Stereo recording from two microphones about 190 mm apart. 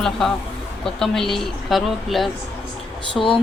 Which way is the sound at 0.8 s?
Centre (ahead or behind).